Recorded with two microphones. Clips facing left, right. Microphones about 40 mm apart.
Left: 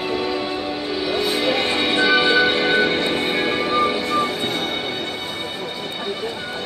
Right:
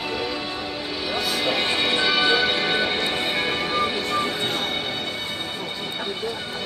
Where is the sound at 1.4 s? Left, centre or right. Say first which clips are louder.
Left 3 dB; centre.